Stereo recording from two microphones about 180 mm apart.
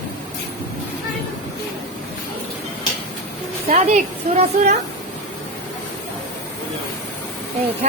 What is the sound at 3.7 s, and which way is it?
A woman's voice, 40° right (ahead or behind).